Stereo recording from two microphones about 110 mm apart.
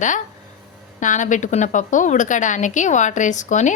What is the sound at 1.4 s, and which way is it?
A woman's voice, 90° left.